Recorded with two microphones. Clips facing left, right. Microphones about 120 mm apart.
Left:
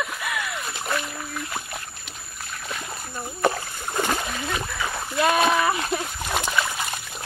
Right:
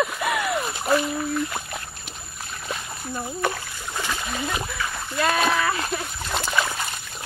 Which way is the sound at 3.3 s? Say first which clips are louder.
Left 7 dB; 40° left (ahead or behind).